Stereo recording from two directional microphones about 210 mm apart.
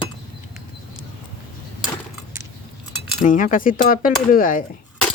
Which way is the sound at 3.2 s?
40° left (ahead or behind).